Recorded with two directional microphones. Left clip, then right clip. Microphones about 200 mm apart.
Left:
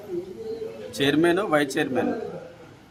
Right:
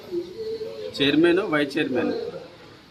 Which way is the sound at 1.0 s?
15° left (ahead or behind).